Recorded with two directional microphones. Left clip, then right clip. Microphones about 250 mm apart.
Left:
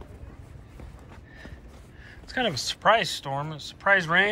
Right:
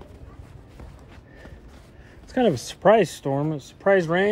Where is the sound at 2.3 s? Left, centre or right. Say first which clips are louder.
Right 5 dB; right.